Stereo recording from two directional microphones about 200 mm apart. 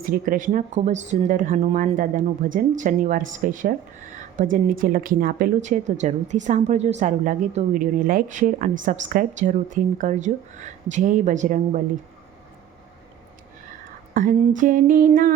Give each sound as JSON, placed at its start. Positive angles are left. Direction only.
{"t": 0.0, "sound": "speech", "side_deg": -45}
{"t": 14.1, "sound": "speech", "side_deg": -40}